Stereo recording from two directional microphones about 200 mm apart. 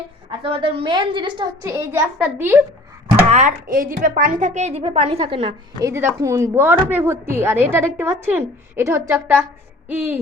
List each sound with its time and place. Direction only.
0.3 s a woman's voice: 25° right (ahead or behind)
1.7 s a woman's voice: 10° right (ahead or behind)
3.2 s speech: 40° right (ahead or behind)
5.9 s a woman's voice: 15° right (ahead or behind)